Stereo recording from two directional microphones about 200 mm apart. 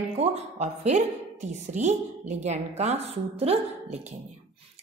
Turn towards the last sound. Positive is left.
turn(degrees=-30)  # may be behind; listen again after turning